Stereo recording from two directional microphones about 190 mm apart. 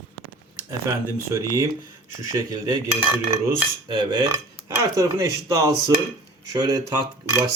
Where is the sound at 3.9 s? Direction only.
25° right (ahead or behind).